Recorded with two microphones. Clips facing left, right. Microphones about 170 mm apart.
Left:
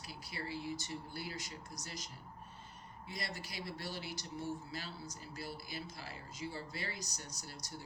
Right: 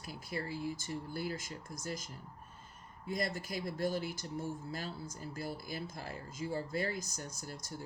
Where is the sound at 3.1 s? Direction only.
50° right (ahead or behind).